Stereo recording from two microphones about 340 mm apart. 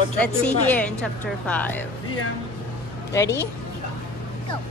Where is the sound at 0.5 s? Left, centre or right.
Centre.